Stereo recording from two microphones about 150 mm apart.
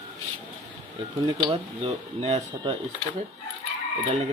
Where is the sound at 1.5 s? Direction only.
45° right (ahead or behind).